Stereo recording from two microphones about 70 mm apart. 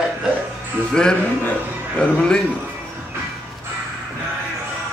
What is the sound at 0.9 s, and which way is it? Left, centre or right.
A man's voice, centre.